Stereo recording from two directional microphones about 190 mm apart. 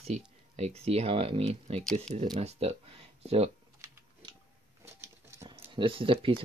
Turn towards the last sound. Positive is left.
turn(degrees=-30)  # may be behind; listen again after turning